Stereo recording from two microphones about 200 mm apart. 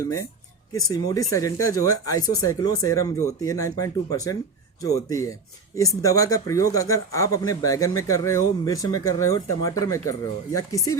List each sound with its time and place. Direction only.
0.0 s speech: 15° left (ahead or behind)